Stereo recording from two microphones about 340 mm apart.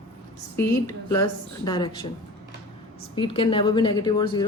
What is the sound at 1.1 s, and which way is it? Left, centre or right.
Speech, centre.